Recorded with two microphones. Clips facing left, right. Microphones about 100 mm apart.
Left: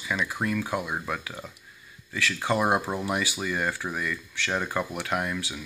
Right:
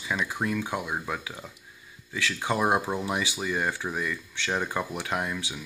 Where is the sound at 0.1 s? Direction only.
20° right (ahead or behind).